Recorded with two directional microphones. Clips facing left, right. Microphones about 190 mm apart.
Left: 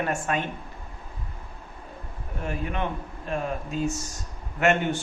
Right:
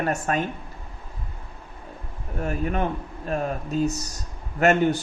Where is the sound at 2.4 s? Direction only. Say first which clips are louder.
Right 4 dB; 45° right (ahead or behind).